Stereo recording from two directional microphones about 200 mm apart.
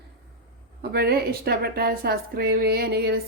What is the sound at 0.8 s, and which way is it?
A woman's voice, 50° right (ahead or behind).